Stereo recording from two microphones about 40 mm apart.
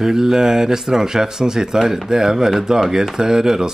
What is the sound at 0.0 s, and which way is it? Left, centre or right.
Speech, centre.